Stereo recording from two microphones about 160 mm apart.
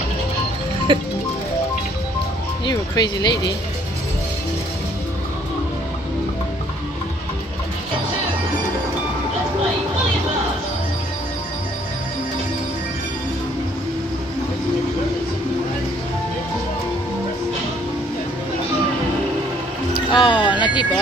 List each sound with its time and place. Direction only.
0.9 s music: 30° right (ahead or behind)
2.6 s speech: 25° left (ahead or behind)
20.1 s music: 30° left (ahead or behind)